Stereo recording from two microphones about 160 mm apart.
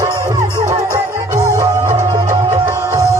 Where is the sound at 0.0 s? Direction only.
20° right (ahead or behind).